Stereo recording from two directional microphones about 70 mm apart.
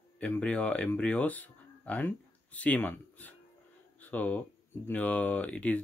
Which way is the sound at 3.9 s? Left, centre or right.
Left.